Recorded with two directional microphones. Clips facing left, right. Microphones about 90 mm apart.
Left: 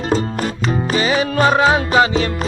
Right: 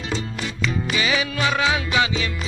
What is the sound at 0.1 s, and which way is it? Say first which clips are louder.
Music: left 10 dB; 45° left (ahead or behind).